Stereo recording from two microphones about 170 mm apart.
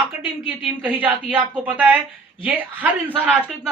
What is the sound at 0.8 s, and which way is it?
Speech, 10° right (ahead or behind).